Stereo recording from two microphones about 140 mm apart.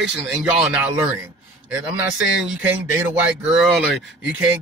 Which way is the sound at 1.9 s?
5° right (ahead or behind).